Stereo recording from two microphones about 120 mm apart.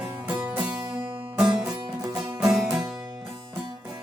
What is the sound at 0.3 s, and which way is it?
Music, 10° right (ahead or behind).